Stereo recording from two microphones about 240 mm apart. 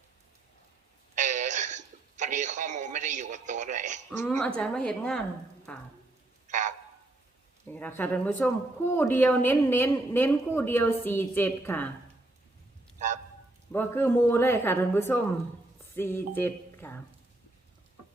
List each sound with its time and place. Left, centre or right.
1.1 s a sound: right
4.2 s a woman's voice: centre
6.5 s frog: right
7.7 s a woman's voice: centre
13.7 s a woman's voice: centre